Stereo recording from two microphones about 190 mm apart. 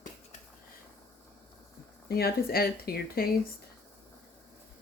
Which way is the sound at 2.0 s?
55° left (ahead or behind).